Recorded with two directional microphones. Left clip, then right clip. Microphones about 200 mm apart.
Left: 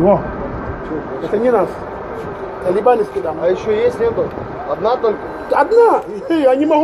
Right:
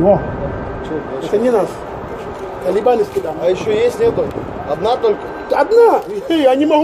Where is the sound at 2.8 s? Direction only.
35° right (ahead or behind).